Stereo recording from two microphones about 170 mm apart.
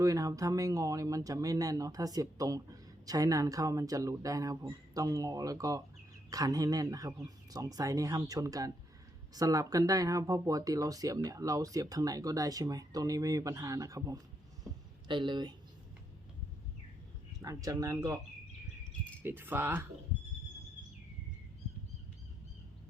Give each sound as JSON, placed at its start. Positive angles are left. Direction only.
{"t": 0.0, "sound": "speech", "side_deg": -20}
{"t": 17.4, "sound": "speech", "side_deg": -20}
{"t": 19.2, "sound": "speech", "side_deg": -10}